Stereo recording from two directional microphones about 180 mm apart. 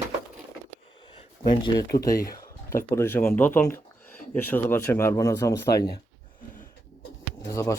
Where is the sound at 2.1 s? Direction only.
55° left (ahead or behind).